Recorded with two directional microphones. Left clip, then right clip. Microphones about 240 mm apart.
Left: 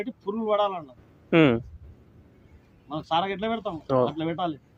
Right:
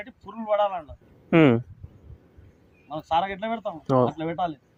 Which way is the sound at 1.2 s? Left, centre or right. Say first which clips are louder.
Right 1 dB; right.